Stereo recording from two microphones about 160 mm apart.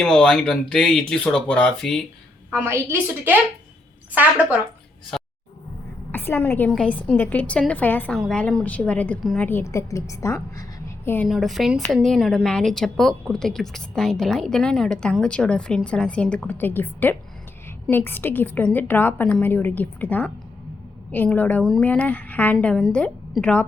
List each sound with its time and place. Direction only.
0.0 s a woman's voice: 5° left (ahead or behind)
2.5 s a woman's voice: 15° right (ahead or behind)
4.1 s a woman's voice: 10° right (ahead or behind)
5.1 s roaring cats: 5° left (ahead or behind)
6.1 s a woman's voice: 15° left (ahead or behind)
9.5 s a woman's voice: 15° left (ahead or behind)
11.3 s a woman's voice: centre (ahead or behind)
21.8 s a woman's voice: 10° left (ahead or behind)